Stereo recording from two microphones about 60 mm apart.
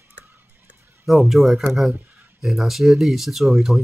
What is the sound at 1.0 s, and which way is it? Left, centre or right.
Speech, centre.